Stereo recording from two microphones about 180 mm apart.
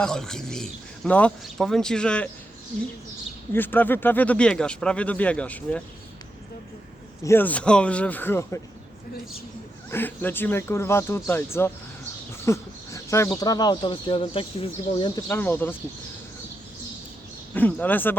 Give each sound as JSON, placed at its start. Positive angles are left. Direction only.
{"t": 0.0, "sound": "speech", "side_deg": 5}
{"t": 3.5, "sound": "speech", "side_deg": 10}
{"t": 7.3, "sound": "speech", "side_deg": 10}
{"t": 9.9, "sound": "speech", "side_deg": 10}
{"t": 15.1, "sound": "speech", "side_deg": 10}
{"t": 17.5, "sound": "speech", "side_deg": 10}